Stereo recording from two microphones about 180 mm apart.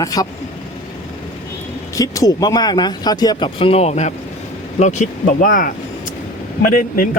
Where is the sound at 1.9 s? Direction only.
20° left (ahead or behind).